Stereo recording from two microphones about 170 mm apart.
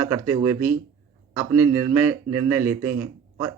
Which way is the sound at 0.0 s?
10° right (ahead or behind).